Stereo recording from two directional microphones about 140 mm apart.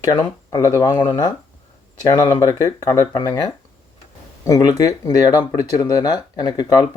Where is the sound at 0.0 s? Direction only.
30° left (ahead or behind).